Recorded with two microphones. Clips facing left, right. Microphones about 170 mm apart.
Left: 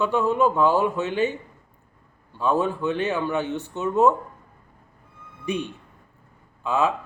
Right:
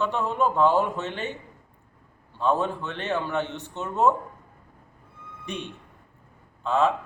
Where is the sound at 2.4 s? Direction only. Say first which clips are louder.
Left 2 dB; 5° left (ahead or behind).